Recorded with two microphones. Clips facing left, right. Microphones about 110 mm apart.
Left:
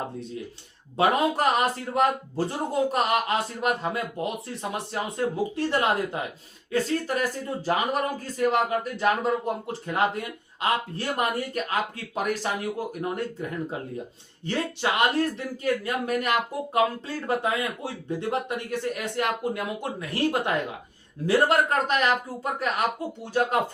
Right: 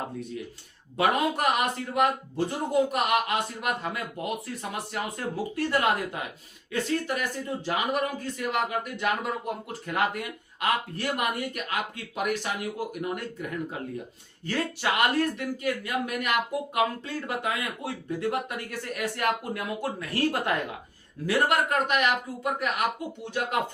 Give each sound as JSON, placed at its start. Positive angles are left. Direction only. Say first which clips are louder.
{"t": 0.9, "sound": "speech", "louder": "left 2 dB", "side_deg": 35}
{"t": 14.4, "sound": "speech", "louder": "left 1 dB", "side_deg": 25}
{"t": 21.2, "sound": "speech", "louder": "left 3 dB", "side_deg": 30}